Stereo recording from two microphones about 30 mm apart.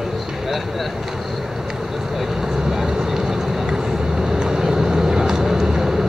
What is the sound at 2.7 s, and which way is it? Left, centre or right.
Vehicle, centre.